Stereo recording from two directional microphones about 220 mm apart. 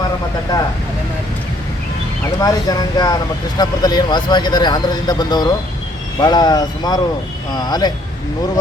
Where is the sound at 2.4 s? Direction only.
20° left (ahead or behind).